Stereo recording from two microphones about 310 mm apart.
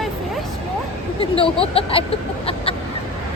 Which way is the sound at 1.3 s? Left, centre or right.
Centre.